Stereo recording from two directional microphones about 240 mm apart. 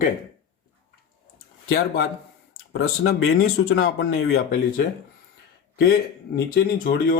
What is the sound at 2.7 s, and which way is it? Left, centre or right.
Speech, left.